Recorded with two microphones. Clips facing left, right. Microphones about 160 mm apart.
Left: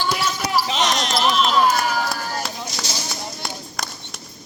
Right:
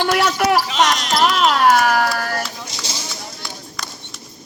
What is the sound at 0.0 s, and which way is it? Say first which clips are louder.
Basketball bounce: right 7 dB; 70° right (ahead or behind).